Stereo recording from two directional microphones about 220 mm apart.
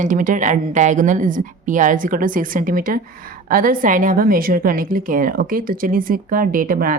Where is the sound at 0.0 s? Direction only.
35° right (ahead or behind).